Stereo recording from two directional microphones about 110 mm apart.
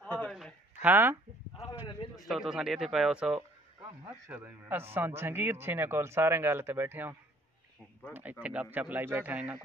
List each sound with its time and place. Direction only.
0.3 s a sound: centre (ahead or behind)
0.8 s a man's voice: 20° right (ahead or behind)
2.1 s speech: centre (ahead or behind)
4.3 s a man's voice: 15° right (ahead or behind)